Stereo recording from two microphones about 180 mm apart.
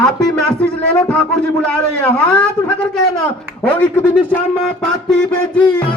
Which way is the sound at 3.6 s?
10° left (ahead or behind).